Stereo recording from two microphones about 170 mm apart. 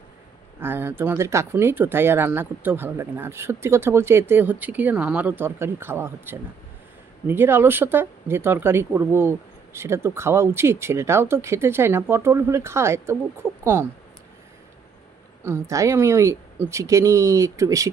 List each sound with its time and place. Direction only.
0.6 s speech: 10° right (ahead or behind)
15.4 s speech: 15° right (ahead or behind)